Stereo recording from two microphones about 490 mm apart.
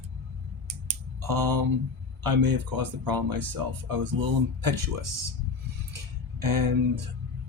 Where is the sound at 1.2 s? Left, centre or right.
Right.